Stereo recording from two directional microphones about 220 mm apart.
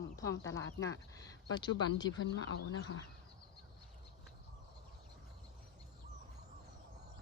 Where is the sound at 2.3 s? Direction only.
55° left (ahead or behind).